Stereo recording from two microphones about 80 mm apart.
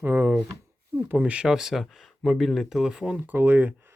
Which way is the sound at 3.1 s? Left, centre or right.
Right.